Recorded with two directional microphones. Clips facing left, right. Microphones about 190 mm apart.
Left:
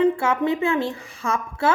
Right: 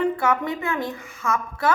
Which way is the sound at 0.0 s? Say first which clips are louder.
Left 3 dB; 25° left (ahead or behind).